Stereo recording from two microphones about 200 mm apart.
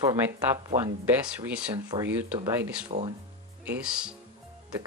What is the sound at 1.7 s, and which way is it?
Speech, 15° right (ahead or behind).